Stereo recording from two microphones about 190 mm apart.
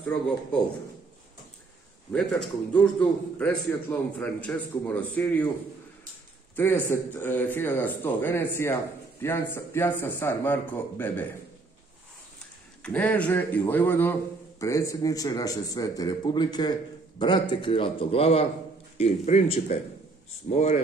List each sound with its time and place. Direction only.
0.0 s a man's voice: 10° left (ahead or behind)
2.1 s a man's voice: 5° left (ahead or behind)
6.5 s a man's voice: 10° left (ahead or behind)
12.8 s a man's voice: 10° left (ahead or behind); by 20.8 s 35° left (ahead or behind)